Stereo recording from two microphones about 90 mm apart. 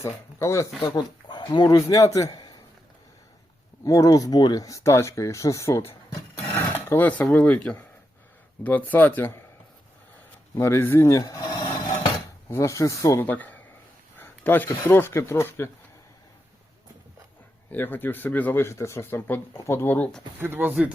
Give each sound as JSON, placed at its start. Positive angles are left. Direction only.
{"t": 0.0, "sound": "speech", "side_deg": 30}
{"t": 0.9, "sound": "speech", "side_deg": 50}
{"t": 3.8, "sound": "speech", "side_deg": 40}
{"t": 6.5, "sound": "filing", "side_deg": 25}
{"t": 8.6, "sound": "speech", "side_deg": 20}
{"t": 10.6, "sound": "speech", "side_deg": 25}
{"t": 13.2, "sound": "speech", "side_deg": 20}
{"t": 17.7, "sound": "speech", "side_deg": 20}
{"t": 20.4, "sound": "speech", "side_deg": -20}